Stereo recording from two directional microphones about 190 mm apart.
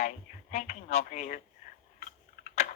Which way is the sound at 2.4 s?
35° left (ahead or behind).